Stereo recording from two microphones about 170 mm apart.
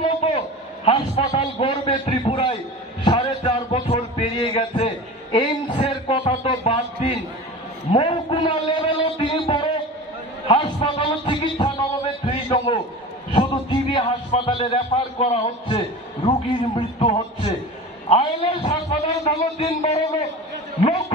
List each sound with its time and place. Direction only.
0.8 s a man's voice: 30° left (ahead or behind)
3.0 s a sound: 30° left (ahead or behind)
16.3 s a man's voice: 30° left (ahead or behind)